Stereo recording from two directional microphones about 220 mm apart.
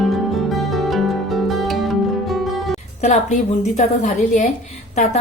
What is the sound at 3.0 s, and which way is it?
Speech, 35° left (ahead or behind).